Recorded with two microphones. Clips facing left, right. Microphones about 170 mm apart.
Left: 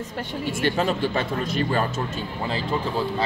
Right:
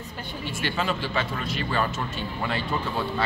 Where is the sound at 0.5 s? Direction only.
45° left (ahead or behind).